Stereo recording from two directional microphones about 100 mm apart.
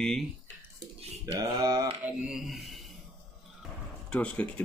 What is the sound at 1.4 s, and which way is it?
Mantra, 40° right (ahead or behind).